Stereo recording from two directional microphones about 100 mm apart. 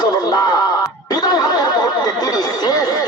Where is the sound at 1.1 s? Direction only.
40° left (ahead or behind).